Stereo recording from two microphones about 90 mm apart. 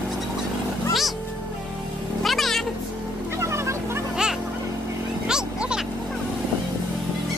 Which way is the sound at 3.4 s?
30° right (ahead or behind).